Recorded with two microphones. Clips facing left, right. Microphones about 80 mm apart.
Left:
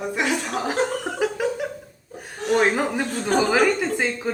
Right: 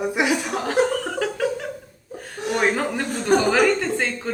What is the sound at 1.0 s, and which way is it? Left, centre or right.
Chuckle, centre.